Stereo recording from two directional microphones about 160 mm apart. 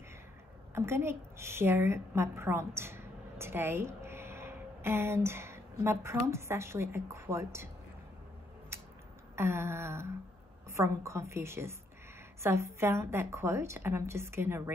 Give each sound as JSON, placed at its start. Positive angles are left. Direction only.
{"t": 0.7, "sound": "a woman's voice", "side_deg": -15}
{"t": 8.7, "sound": "a sound", "side_deg": -15}
{"t": 9.3, "sound": "a woman's voice", "side_deg": -15}